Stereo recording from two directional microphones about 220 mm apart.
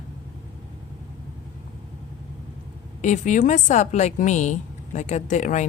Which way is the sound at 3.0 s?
35° left (ahead or behind).